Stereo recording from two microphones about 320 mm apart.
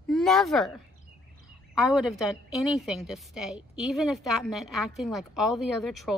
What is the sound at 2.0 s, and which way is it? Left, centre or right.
A woman's voice, centre.